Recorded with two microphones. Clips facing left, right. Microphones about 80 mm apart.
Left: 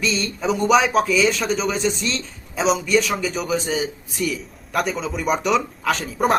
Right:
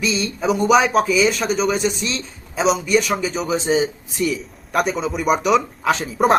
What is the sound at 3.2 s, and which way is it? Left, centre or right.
Speech, right.